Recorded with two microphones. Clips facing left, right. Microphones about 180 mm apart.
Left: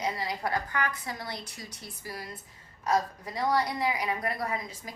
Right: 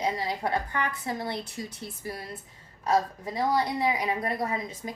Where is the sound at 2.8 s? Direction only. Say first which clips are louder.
Right 2 dB; 25° right (ahead or behind).